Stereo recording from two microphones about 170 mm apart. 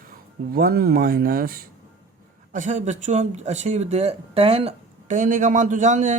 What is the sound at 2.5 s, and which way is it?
Speech, 50° right (ahead or behind).